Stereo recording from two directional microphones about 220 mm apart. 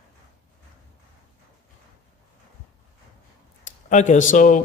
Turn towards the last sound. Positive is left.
turn(degrees=35)  # may be behind; listen again after turning